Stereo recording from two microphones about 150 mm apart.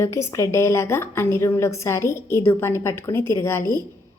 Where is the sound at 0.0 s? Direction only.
20° left (ahead or behind).